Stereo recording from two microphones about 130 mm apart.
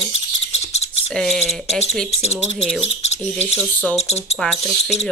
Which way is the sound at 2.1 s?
50° left (ahead or behind).